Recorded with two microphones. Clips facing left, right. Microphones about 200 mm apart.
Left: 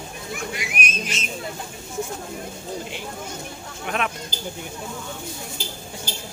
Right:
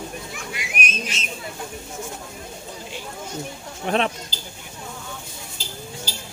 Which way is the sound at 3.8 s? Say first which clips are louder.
Right 5 dB; 30° right (ahead or behind).